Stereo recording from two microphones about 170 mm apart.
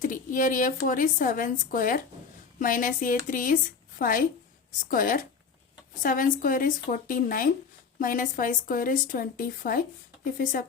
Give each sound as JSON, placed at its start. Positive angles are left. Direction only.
{"t": 0.0, "sound": "a woman's voice", "side_deg": 50}